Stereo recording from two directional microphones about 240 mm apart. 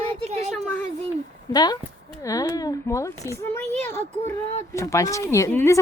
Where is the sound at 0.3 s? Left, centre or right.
Right.